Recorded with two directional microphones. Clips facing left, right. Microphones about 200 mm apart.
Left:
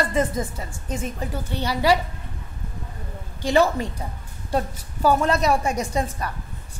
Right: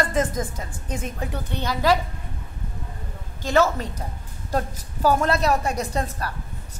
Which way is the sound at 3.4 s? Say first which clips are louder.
Left 1 dB; 15° left (ahead or behind).